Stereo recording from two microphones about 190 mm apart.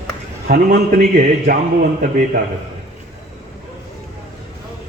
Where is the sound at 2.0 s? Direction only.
50° right (ahead or behind).